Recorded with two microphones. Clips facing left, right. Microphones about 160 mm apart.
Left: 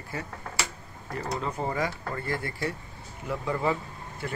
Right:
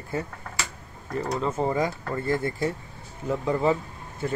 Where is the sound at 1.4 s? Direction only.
20° right (ahead or behind).